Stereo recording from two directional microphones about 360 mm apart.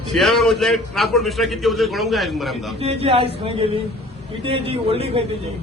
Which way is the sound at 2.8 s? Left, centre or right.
Centre.